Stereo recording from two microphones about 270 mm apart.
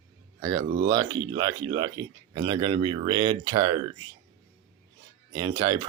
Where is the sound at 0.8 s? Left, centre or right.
Centre.